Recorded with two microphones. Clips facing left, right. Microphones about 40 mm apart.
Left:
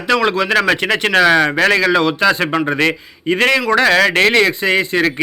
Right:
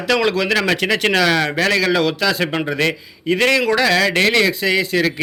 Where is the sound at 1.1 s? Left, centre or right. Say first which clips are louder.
Left 7 dB; left.